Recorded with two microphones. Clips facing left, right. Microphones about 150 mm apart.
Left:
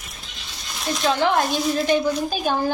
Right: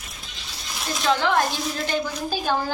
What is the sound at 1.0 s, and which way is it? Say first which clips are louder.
Speech: left 1 dB; 20° left (ahead or behind).